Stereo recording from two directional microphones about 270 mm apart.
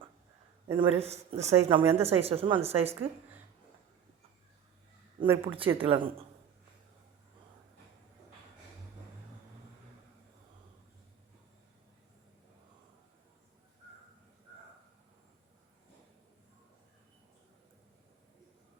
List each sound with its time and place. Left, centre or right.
0.7 s a woman's voice: centre
5.2 s a woman's voice: centre